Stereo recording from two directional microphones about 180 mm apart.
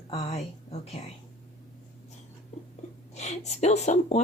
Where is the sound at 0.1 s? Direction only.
35° left (ahead or behind).